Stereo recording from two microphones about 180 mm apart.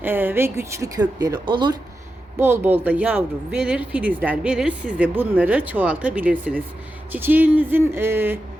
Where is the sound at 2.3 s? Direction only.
15° right (ahead or behind).